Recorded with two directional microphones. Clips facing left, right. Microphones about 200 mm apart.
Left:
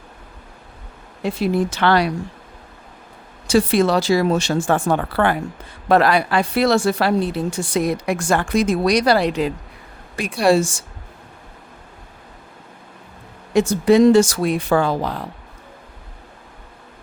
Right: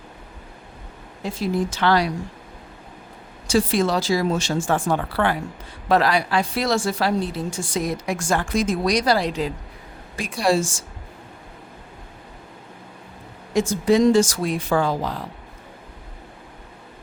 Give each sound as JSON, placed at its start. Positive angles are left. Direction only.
{"t": 1.2, "sound": "speech", "side_deg": 65}
{"t": 3.4, "sound": "speech", "side_deg": 65}
{"t": 13.5, "sound": "speech", "side_deg": 65}